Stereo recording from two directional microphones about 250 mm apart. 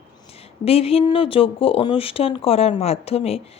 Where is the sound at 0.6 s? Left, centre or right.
Left.